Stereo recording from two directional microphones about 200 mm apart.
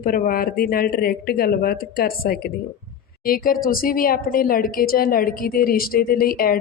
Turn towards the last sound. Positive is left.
turn(degrees=45)  # may be behind; listen again after turning